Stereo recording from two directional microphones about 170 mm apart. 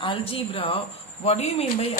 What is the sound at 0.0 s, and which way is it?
Speech, 30° left (ahead or behind).